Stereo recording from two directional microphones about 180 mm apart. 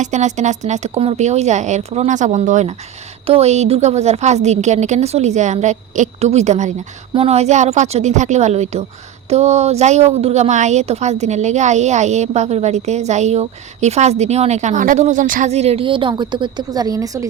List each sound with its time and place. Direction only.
0.0 s a woman's voice: 40° right (ahead or behind); by 17.2 s 20° right (ahead or behind)